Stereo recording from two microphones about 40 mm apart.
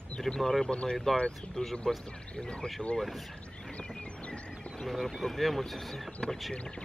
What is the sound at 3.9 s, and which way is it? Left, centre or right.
Music, left.